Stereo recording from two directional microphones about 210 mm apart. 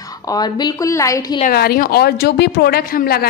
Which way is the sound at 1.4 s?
45° left (ahead or behind).